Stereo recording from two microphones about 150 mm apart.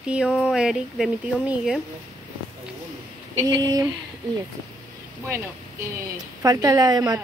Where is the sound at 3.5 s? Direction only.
25° right (ahead or behind).